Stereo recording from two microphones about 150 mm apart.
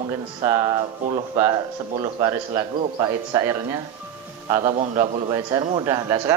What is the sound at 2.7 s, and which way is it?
Speech, 40° right (ahead or behind).